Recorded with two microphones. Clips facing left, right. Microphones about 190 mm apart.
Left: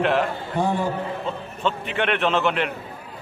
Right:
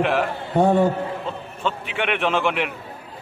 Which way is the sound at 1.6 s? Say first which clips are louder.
Left 1 dB; 10° right (ahead or behind).